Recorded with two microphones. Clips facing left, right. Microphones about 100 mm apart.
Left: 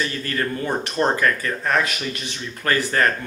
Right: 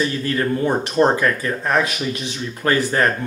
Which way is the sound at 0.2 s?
10° right (ahead or behind).